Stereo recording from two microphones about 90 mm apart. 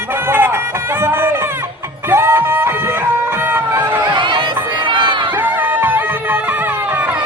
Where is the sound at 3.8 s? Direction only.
20° right (ahead or behind).